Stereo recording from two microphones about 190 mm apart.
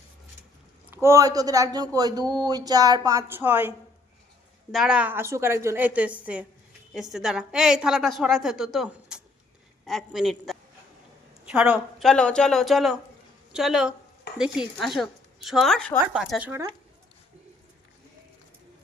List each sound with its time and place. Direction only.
0.9 s speech: 10° right (ahead or behind)
4.7 s a woman's voice: 5° right (ahead or behind)